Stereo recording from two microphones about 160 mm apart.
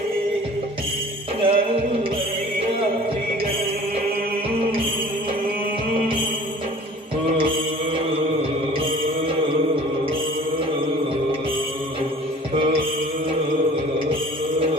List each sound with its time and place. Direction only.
1.4 s music: 35° right (ahead or behind)